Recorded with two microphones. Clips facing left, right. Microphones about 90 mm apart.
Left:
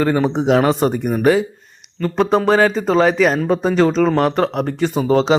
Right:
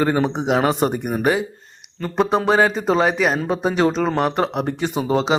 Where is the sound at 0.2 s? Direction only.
5° right (ahead or behind).